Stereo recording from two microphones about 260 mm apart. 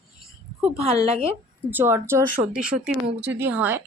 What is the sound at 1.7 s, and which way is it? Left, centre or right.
Speech, centre.